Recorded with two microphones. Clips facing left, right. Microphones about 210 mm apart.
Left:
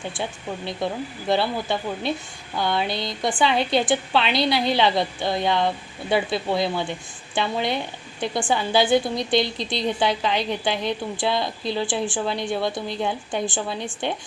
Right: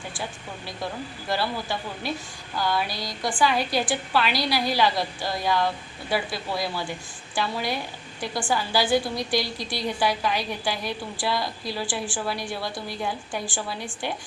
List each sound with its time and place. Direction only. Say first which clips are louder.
0.1 s a woman's voice: left 5 dB; 25° left (ahead or behind)